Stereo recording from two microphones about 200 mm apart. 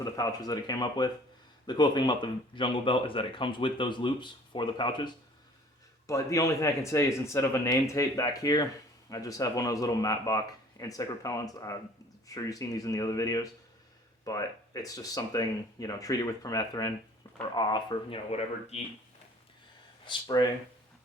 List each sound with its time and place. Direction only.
0.0 s speech: 20° left (ahead or behind)
20.1 s speech: 20° left (ahead or behind)